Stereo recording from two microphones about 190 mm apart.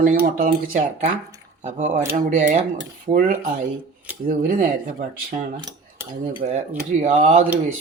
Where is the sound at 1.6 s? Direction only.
40° right (ahead or behind).